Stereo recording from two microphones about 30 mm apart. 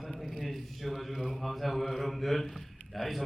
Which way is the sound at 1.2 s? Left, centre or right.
Centre.